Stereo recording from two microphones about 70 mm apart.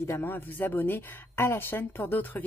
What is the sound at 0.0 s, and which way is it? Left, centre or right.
A woman's voice, left.